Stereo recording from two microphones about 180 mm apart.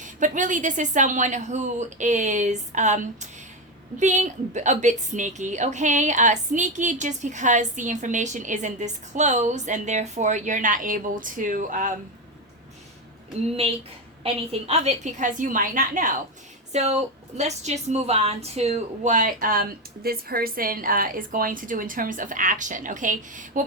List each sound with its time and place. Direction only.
0.0 s a woman's voice: 45° right (ahead or behind)
14.7 s a woman's voice: 35° right (ahead or behind)